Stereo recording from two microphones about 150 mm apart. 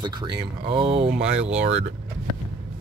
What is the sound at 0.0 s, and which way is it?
Speech, 30° right (ahead or behind).